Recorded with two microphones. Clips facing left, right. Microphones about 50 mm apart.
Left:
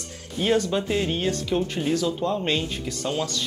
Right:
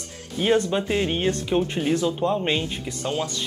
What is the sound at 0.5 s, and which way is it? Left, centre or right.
Speech, right.